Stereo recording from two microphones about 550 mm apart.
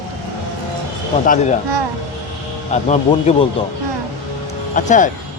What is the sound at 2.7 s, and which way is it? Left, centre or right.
Speech, centre.